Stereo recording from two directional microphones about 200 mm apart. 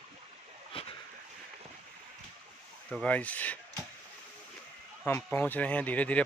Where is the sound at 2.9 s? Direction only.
5° left (ahead or behind).